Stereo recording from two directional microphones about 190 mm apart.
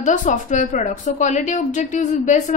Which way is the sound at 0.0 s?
40° left (ahead or behind).